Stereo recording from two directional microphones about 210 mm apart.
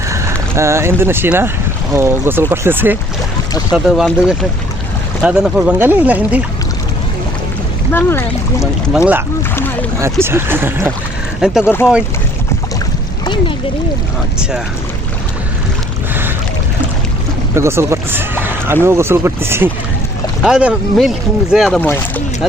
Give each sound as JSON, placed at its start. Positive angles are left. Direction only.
{"t": 0.1, "sound": "speech", "side_deg": -15}
{"t": 7.9, "sound": "speech", "side_deg": 10}
{"t": 10.0, "sound": "speech", "side_deg": -10}
{"t": 11.6, "sound": "speech", "side_deg": 10}
{"t": 17.5, "sound": "speech", "side_deg": -10}